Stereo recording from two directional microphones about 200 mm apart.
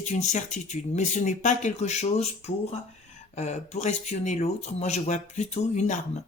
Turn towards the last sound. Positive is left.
turn(degrees=35)  # may be behind; listen again after turning